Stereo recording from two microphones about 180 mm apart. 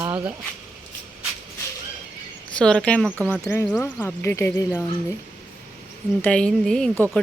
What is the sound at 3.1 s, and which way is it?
Speech, 10° right (ahead or behind).